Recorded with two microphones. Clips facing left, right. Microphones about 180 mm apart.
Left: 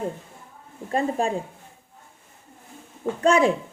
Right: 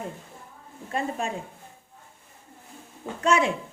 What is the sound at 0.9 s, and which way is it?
Speech, 35° left (ahead or behind).